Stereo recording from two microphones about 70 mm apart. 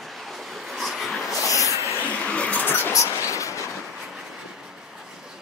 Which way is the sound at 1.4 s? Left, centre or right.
Left.